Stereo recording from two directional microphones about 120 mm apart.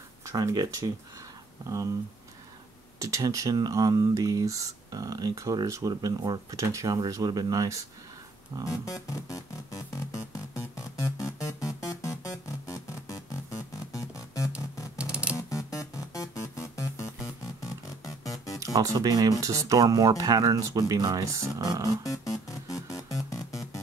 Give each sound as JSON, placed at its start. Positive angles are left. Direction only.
{"t": 0.2, "sound": "speech", "side_deg": -30}
{"t": 3.0, "sound": "speech", "side_deg": -25}
{"t": 8.6, "sound": "music", "side_deg": 30}
{"t": 11.6, "sound": "music", "side_deg": 25}
{"t": 15.0, "sound": "music", "side_deg": -10}
{"t": 15.8, "sound": "music", "side_deg": 25}
{"t": 18.6, "sound": "speech", "side_deg": -30}
{"t": 22.0, "sound": "music", "side_deg": 30}